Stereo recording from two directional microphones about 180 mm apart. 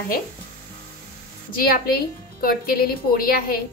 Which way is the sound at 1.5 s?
55° left (ahead or behind).